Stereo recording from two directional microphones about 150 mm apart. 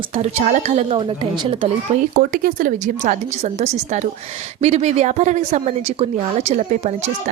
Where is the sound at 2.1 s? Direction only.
75° right (ahead or behind).